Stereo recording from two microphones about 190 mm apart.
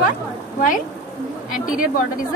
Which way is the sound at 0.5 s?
45° left (ahead or behind).